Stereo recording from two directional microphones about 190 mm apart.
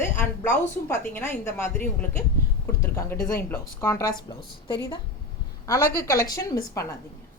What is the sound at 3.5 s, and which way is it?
A woman's voice, 15° left (ahead or behind).